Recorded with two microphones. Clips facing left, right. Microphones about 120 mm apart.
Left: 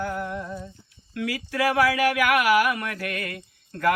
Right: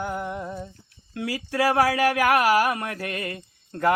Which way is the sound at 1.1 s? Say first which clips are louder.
Even; 30° right (ahead or behind).